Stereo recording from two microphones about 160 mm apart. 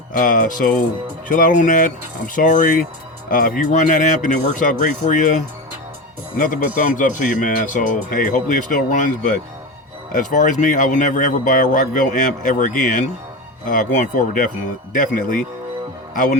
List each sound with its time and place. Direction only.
0.2 s a man's voice: 55° left (ahead or behind)